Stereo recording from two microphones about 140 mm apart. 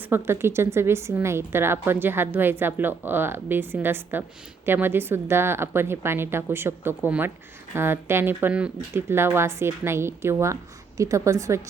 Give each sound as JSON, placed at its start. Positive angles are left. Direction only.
{"t": 0.1, "sound": "a woman's voice", "side_deg": -15}